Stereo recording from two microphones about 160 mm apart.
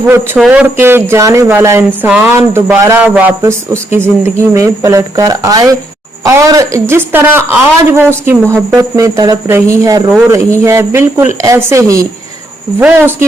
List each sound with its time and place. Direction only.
0.3 s a woman's voice: 5° right (ahead or behind)